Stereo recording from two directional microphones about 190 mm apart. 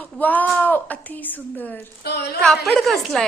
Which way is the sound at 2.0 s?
55° left (ahead or behind).